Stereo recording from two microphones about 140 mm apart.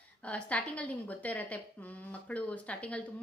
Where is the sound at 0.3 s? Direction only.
10° left (ahead or behind).